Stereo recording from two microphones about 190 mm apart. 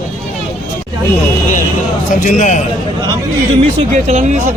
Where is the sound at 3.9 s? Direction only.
40° right (ahead or behind).